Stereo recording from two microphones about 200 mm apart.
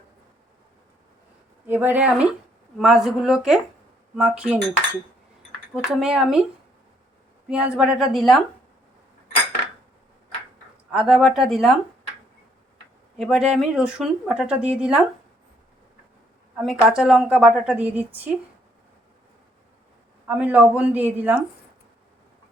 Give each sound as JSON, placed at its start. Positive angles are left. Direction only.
{"t": 1.6, "sound": "a woman's voice", "side_deg": -10}
{"t": 5.7, "sound": "a woman's voice", "side_deg": -5}
{"t": 7.5, "sound": "a woman's voice", "side_deg": -5}
{"t": 10.9, "sound": "a woman's voice", "side_deg": 0}
{"t": 13.1, "sound": "a woman's voice", "side_deg": 0}
{"t": 16.6, "sound": "a woman's voice", "side_deg": -5}
{"t": 20.2, "sound": "speech", "side_deg": -5}